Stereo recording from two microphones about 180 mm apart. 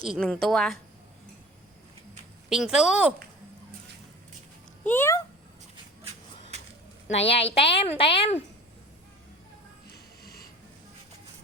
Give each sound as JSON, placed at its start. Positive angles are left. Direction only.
{"t": 0.2, "sound": "a woman's voice", "side_deg": 5}
{"t": 2.5, "sound": "a woman's voice", "side_deg": -5}
{"t": 4.8, "sound": "speech", "side_deg": 10}
{"t": 7.2, "sound": "a woman's voice", "side_deg": 35}
{"t": 9.8, "sound": "music", "side_deg": 55}